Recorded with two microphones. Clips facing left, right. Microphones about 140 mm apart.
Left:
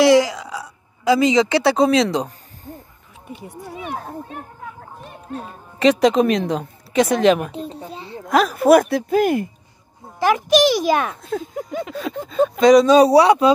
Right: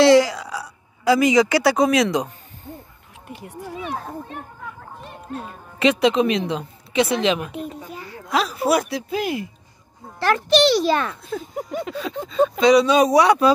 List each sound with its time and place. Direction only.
0.0 s a sound: 15° left (ahead or behind); by 2.7 s 35° left (ahead or behind)
5.8 s a woman's voice: 40° left (ahead or behind)
7.5 s a child's voice: 30° left (ahead or behind)
8.3 s a woman's voice: 50° left (ahead or behind)
10.1 s a child's voice: 15° left (ahead or behind)
11.9 s a woman's voice: 50° left (ahead or behind); by 13.5 s 30° left (ahead or behind)